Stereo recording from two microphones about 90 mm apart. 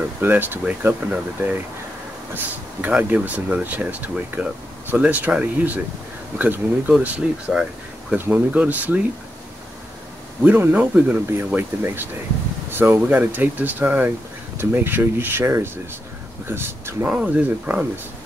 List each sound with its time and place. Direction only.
0.2 s speech: 20° right (ahead or behind)
10.4 s speech: 20° right (ahead or behind)
17.1 s speech: 15° right (ahead or behind)